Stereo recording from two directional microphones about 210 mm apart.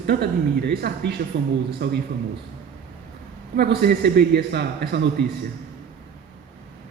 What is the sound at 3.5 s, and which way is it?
A man's voice, 50° right (ahead or behind).